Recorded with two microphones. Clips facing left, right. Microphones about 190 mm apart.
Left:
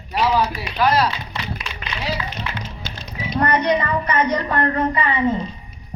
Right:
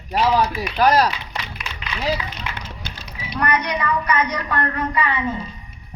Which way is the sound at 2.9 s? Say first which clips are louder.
Left 5 dB; 45° left (ahead or behind).